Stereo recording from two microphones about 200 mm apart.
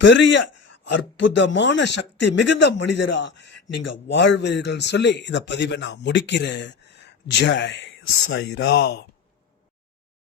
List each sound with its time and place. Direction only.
0.0 s a man's voice: 65° left (ahead or behind)